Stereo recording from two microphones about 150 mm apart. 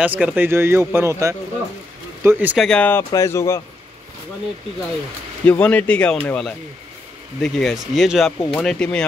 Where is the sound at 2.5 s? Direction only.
5° left (ahead or behind); by 3.6 s 20° left (ahead or behind).